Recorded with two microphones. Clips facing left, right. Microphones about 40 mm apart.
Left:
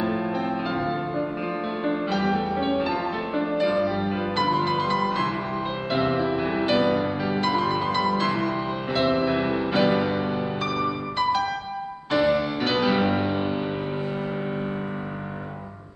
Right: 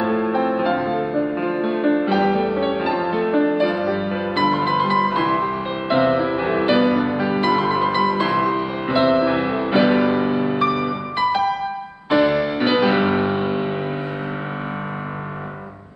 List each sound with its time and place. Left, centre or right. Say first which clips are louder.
0.0 s music: right 6 dB; centre